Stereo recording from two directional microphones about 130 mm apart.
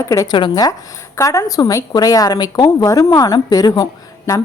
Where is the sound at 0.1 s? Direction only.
30° left (ahead or behind).